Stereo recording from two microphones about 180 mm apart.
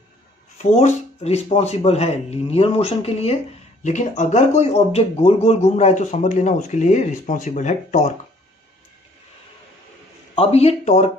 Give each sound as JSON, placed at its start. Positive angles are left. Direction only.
{"t": 0.6, "sound": "speech", "side_deg": 35}
{"t": 10.3, "sound": "speech", "side_deg": 35}